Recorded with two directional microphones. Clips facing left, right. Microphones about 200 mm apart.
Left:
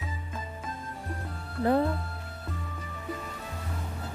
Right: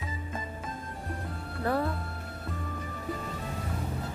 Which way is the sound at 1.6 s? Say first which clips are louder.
Left 5 dB; 20° left (ahead or behind).